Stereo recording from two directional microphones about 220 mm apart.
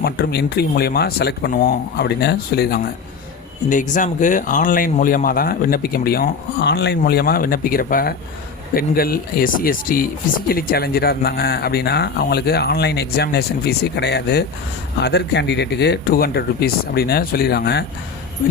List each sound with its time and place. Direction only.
0.0 s speech: 45° left (ahead or behind)